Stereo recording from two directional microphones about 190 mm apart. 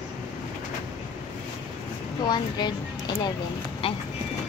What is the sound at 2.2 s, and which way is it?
Speech, 20° left (ahead or behind).